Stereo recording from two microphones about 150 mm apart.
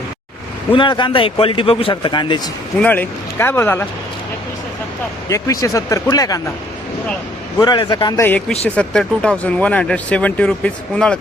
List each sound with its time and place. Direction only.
0.7 s speech: 30° left (ahead or behind)
2.7 s speech: 10° left (ahead or behind)
5.3 s speech: 25° left (ahead or behind)
7.6 s speech: 30° left (ahead or behind)
8.2 s speech: 10° left (ahead or behind)